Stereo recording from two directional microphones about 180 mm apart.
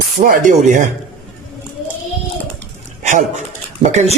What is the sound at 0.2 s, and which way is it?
Speech, 50° right (ahead or behind).